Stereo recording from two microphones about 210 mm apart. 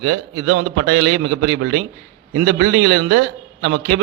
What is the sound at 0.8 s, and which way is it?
A man's voice, 60° right (ahead or behind).